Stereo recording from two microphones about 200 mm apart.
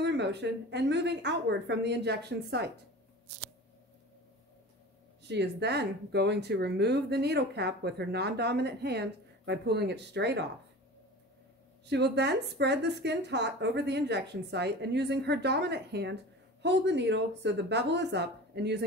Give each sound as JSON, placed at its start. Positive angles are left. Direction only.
{"t": 0.0, "sound": "speech", "side_deg": -60}
{"t": 5.3, "sound": "speech", "side_deg": -55}
{"t": 11.9, "sound": "speech", "side_deg": -55}